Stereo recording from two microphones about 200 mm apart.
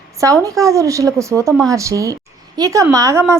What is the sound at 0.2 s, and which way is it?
A woman's voice, 15° right (ahead or behind).